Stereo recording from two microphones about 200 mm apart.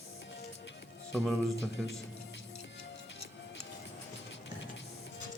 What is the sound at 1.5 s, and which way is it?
Speech, 65° left (ahead or behind).